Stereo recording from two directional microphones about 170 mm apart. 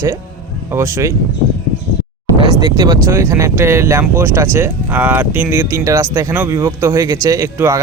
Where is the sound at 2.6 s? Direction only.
25° right (ahead or behind).